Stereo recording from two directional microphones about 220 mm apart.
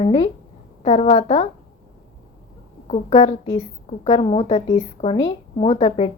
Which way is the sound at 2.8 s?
25° left (ahead or behind).